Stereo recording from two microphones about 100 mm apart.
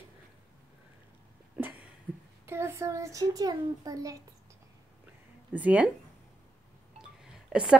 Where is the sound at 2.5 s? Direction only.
30° right (ahead or behind).